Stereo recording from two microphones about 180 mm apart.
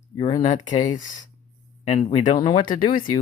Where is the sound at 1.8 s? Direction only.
30° left (ahead or behind).